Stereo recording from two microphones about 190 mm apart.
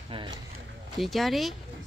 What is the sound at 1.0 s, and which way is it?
Speech, centre (ahead or behind).